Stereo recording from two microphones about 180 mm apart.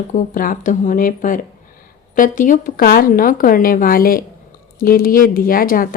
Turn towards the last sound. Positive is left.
turn(degrees=50)  # may be behind; listen again after turning